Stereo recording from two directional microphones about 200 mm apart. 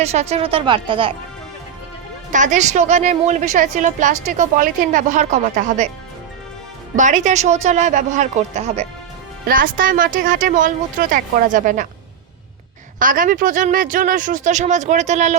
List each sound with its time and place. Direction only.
0.0 s speech: 30° right (ahead or behind)
2.3 s a woman's voice: 40° right (ahead or behind)
6.9 s a woman's voice: 40° right (ahead or behind)
9.5 s a woman's voice: 45° right (ahead or behind)
13.0 s a woman's voice: 40° right (ahead or behind)